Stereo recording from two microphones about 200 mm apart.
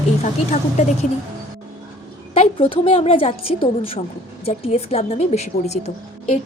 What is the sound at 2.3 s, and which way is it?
A woman's voice, 30° left (ahead or behind).